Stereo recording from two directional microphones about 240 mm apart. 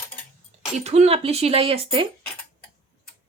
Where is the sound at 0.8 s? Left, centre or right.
Right.